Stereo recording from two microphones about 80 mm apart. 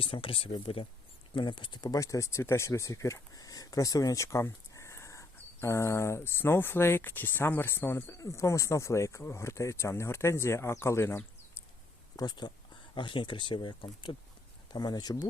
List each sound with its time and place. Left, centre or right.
0.1 s speech: left
2.0 s speech: left
8.2 s speech: left
12.1 s speech: left
12.9 s speech: left
14.7 s speech: left